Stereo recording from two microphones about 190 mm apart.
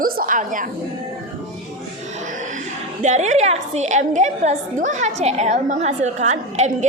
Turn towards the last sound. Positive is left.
turn(degrees=-40)  # may be behind; listen again after turning